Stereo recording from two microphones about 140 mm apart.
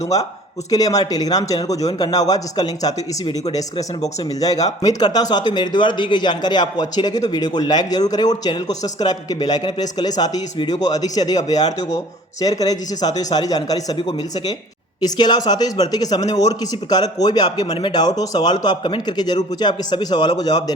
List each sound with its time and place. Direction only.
0.0 s speech: 25° left (ahead or behind)